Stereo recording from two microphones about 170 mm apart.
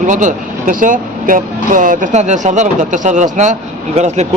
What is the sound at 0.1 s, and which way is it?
A man's voice, 45° right (ahead or behind).